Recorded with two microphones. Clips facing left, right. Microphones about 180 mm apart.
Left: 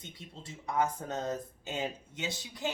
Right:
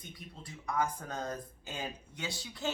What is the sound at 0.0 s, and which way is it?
Speech, 25° left (ahead or behind).